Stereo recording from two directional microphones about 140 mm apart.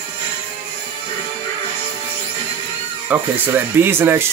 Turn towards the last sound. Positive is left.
turn(degrees=-15)  # may be behind; listen again after turning